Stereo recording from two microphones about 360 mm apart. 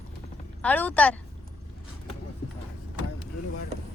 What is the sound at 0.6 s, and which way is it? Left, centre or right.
Speech, centre.